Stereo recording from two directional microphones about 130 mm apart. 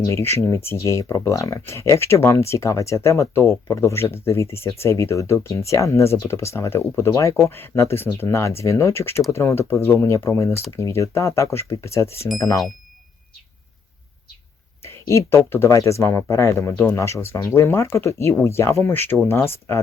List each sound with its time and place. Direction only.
0.0 s speech: 20° left (ahead or behind)
14.8 s speech: 20° left (ahead or behind)